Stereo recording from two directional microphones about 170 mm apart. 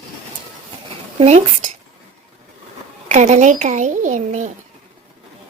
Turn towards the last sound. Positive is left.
turn(degrees=-50)  # may be behind; listen again after turning